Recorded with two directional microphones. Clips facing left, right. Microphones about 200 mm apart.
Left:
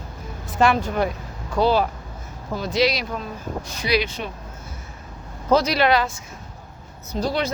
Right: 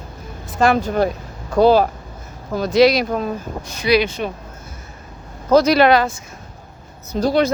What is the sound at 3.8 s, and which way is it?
Speech, 60° right (ahead or behind).